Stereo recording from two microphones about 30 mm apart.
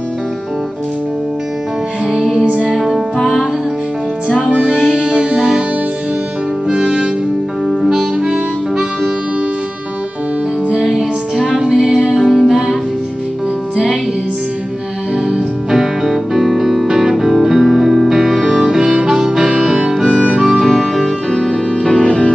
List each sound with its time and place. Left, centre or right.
2.4 s music: right
2.7 s music: centre
4.5 s music: right
6.7 s music: right
7.9 s harmonica: centre
10.8 s music: centre
11.9 s music: centre
15.2 s music: centre
18.1 s harmonica: centre
19.6 s music: centre
20.4 s music: centre
21.8 s music: centre